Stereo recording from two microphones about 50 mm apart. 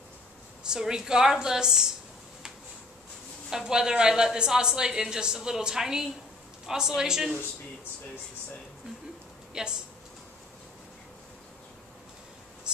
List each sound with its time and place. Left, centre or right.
0.7 s a woman's voice: centre
3.4 s a woman's voice: centre
9.5 s speech: centre
12.7 s a sound: centre